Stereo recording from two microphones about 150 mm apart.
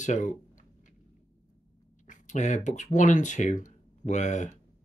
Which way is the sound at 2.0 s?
55° left (ahead or behind).